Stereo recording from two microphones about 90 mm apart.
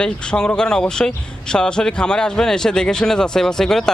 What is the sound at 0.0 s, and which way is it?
Speech, 10° left (ahead or behind).